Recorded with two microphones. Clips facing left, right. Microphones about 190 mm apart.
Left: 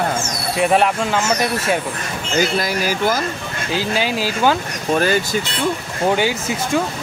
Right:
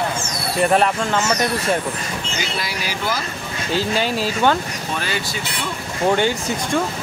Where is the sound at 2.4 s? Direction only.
45° left (ahead or behind).